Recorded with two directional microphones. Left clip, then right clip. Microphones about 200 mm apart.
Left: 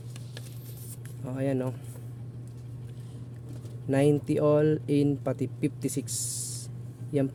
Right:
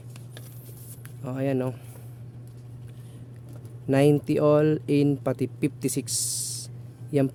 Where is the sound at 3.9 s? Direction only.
20° right (ahead or behind).